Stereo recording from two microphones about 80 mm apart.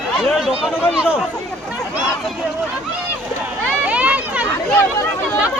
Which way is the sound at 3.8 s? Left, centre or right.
Centre.